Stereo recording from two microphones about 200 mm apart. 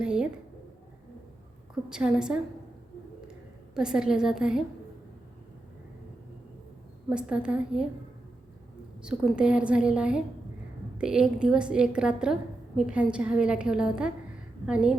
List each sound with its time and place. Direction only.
0.0 s a sound: 5° right (ahead or behind)
1.9 s a woman's voice: 5° right (ahead or behind)
3.8 s a woman's voice: 5° right (ahead or behind)
7.1 s a woman's voice: 5° right (ahead or behind)
9.0 s a woman's voice: 5° right (ahead or behind)